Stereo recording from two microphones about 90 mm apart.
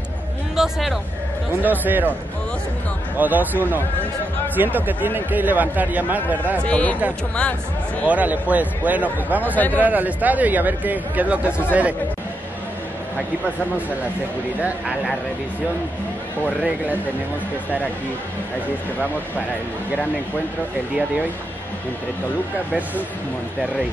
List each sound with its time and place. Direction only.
0.6 s speech: centre (ahead or behind)
1.5 s speech: 20° right (ahead or behind)
3.2 s speech: 20° right (ahead or behind)
6.6 s speech: 15° left (ahead or behind)
8.1 s speech: 15° right (ahead or behind)
14.6 s speech: 10° right (ahead or behind)